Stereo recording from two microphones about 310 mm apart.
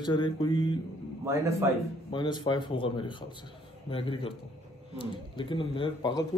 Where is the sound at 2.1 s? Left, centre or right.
Centre.